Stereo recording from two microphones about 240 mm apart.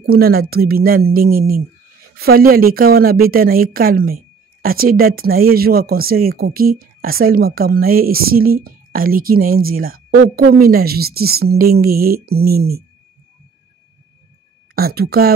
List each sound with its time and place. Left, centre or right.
0.0 s a woman's voice: right
14.8 s a woman's voice: right